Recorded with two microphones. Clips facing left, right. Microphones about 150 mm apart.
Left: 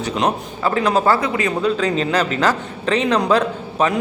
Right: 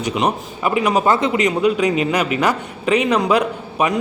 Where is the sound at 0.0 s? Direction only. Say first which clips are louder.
Even; 10° right (ahead or behind).